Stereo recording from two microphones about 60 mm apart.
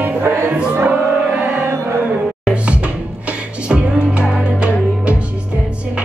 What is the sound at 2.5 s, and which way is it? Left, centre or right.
Music, right.